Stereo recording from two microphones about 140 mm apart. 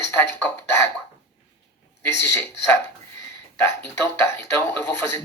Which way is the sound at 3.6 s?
20° left (ahead or behind).